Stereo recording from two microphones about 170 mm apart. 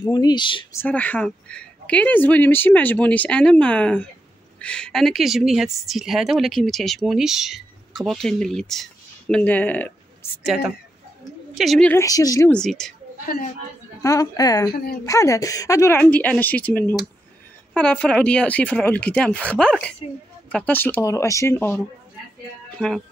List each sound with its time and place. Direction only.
0.0 s a woman's voice: 25° left (ahead or behind)
0.7 s a woman's voice: 10° left (ahead or behind)
10.4 s a woman's voice: 5° right (ahead or behind)
11.9 s a woman's voice: 20° left (ahead or behind)
12.4 s a woman's voice: 5° left (ahead or behind)
14.0 s a woman's voice: 20° left (ahead or behind)
14.7 s a woman's voice: 65° left (ahead or behind)
15.0 s speech: 20° left (ahead or behind)
22.8 s a woman's voice: 5° left (ahead or behind)